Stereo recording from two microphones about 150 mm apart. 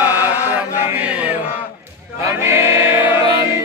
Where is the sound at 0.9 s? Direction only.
10° right (ahead or behind).